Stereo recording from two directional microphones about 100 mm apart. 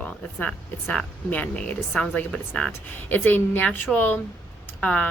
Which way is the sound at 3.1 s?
20° left (ahead or behind).